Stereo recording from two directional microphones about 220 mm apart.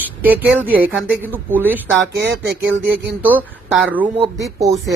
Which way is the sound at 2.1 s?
50° right (ahead or behind).